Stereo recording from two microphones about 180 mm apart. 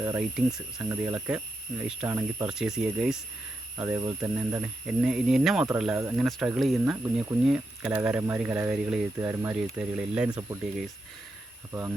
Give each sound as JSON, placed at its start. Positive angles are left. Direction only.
{"t": 0.2, "sound": "speech", "side_deg": -5}
{"t": 9.1, "sound": "speech", "side_deg": -15}
{"t": 10.2, "sound": "speech", "side_deg": -20}
{"t": 11.7, "sound": "speech", "side_deg": -15}